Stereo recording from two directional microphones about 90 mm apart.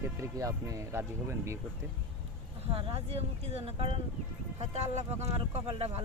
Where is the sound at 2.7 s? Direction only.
90° right.